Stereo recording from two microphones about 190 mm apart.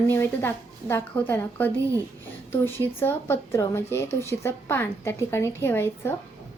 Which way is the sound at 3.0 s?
10° left (ahead or behind).